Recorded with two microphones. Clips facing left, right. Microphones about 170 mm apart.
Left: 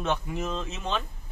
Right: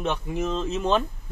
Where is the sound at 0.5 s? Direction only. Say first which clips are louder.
Right 8 dB; 35° right (ahead or behind).